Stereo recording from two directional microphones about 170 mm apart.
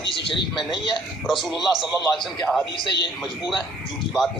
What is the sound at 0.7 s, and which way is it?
Speech, 30° left (ahead or behind).